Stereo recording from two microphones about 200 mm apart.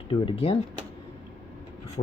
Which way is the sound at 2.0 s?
35° left (ahead or behind).